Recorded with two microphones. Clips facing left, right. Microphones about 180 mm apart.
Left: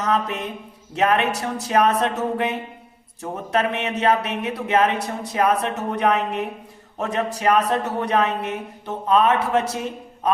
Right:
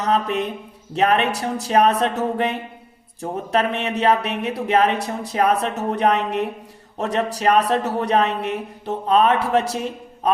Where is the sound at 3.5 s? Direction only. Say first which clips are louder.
Right 1 dB; 30° right (ahead or behind).